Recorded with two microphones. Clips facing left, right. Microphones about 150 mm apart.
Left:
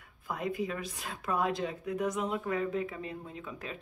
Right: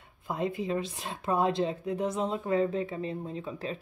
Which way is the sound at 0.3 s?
25° right (ahead or behind).